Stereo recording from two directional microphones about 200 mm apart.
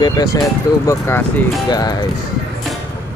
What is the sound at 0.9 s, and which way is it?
Speech, 10° left (ahead or behind).